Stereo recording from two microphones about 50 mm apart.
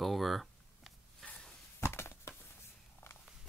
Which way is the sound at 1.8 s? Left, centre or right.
Left.